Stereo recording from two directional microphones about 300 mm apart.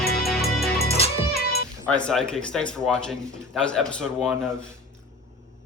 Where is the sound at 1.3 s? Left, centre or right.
Left.